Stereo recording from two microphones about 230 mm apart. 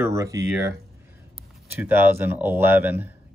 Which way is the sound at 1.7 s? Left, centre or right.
Centre.